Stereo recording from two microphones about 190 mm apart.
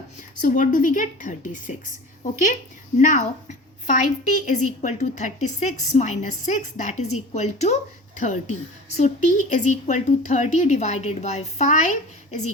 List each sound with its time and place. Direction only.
0.4 s a woman's voice: 45° left (ahead or behind)